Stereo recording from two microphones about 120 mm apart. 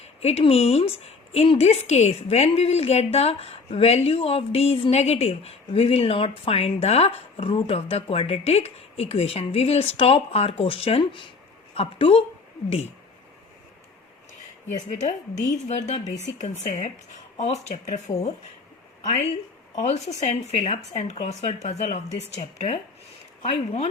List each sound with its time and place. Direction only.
0.2 s a woman's voice: 60° left (ahead or behind)
14.8 s a woman's voice: 80° left
19.7 s a woman's voice: 75° left (ahead or behind)